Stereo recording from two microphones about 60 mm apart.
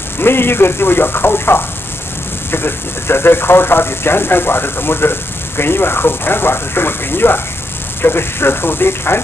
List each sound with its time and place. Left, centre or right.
0.2 s speech: left